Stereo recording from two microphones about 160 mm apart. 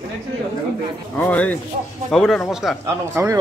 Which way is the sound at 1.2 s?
10° left (ahead or behind).